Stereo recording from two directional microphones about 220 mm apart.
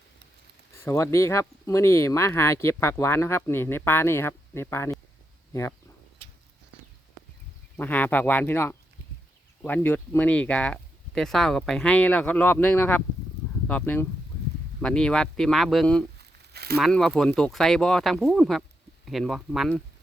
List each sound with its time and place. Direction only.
0.8 s speech: 10° left (ahead or behind)
7.8 s speech: 10° left (ahead or behind)
16.5 s a sound: 45° right (ahead or behind)
16.7 s speech: centre (ahead or behind)